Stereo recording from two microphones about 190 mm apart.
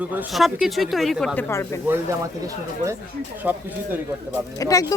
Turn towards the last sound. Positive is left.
turn(degrees=20)  # may be behind; listen again after turning